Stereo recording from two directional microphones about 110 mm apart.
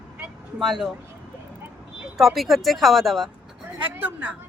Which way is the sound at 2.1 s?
Centre (ahead or behind).